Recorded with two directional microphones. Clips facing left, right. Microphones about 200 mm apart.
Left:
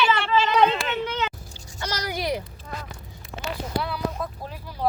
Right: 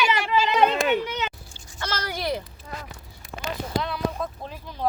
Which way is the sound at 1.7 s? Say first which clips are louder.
Left 1 dB; 15° left (ahead or behind).